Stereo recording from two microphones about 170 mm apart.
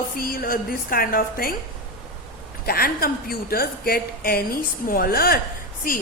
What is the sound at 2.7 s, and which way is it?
A woman's voice, 60° left (ahead or behind).